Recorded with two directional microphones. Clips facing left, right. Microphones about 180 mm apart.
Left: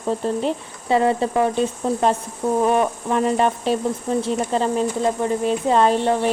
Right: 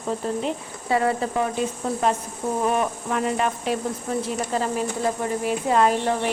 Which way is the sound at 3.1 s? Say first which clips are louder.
Left 6 dB; 35° left (ahead or behind).